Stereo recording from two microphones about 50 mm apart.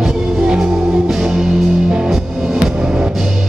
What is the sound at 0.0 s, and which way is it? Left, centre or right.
Music, centre.